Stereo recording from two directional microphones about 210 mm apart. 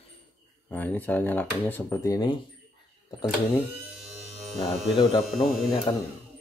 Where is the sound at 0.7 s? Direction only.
10° left (ahead or behind).